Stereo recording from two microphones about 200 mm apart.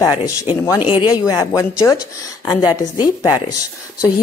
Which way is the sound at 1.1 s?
15° left (ahead or behind).